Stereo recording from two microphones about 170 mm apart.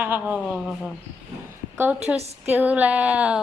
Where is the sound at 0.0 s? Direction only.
10° right (ahead or behind).